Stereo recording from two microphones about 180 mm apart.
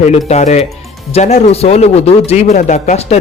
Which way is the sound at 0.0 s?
40° left (ahead or behind).